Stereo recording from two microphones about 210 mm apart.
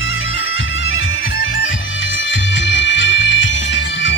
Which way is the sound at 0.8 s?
65° left (ahead or behind).